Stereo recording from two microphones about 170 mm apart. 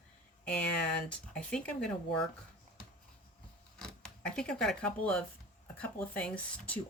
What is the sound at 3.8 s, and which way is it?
Speech, 5° left (ahead or behind).